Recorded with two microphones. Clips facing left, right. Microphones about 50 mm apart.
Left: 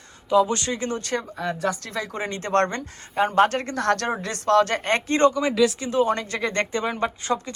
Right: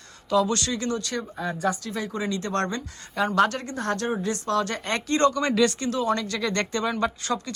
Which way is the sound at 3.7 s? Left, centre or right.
Left.